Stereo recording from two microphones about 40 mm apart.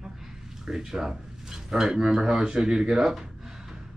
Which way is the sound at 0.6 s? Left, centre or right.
Centre.